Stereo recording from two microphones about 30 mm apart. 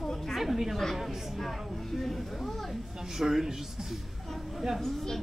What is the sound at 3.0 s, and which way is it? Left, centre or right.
Speech, centre.